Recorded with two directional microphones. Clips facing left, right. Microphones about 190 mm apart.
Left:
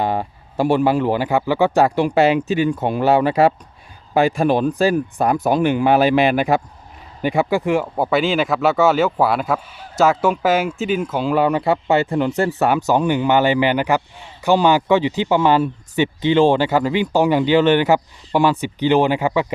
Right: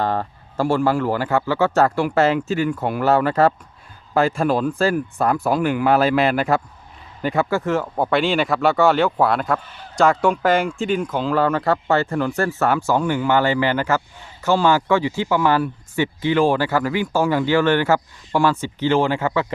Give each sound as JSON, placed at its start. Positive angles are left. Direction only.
{"t": 0.0, "sound": "speech", "side_deg": 10}